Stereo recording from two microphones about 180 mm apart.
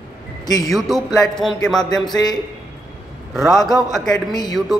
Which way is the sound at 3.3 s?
Centre (ahead or behind).